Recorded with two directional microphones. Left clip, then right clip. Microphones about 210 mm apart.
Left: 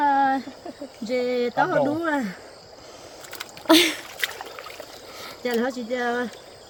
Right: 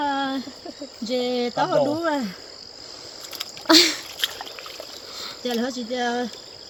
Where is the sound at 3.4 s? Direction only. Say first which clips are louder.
Right 1 dB; centre (ahead or behind).